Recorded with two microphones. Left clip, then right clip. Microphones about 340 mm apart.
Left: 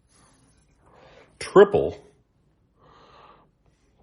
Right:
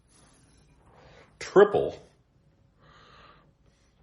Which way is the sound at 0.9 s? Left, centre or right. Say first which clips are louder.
Left 4 dB; left.